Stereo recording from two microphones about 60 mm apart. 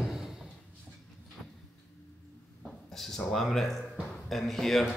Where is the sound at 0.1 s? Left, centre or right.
Centre.